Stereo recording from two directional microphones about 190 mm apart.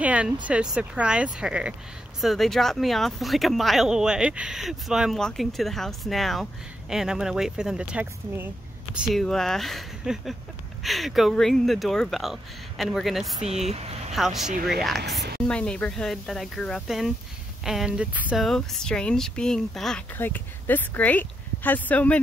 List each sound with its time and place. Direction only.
0.0 s speech: 5° right (ahead or behind)
13.7 s speech: 35° right (ahead or behind)
14.1 s speech: centre (ahead or behind)